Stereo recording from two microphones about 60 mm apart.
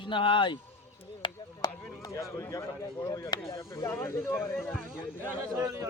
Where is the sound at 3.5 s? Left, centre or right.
Left.